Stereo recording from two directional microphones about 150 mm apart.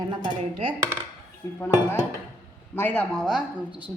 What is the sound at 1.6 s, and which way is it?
A man's voice, 15° left (ahead or behind).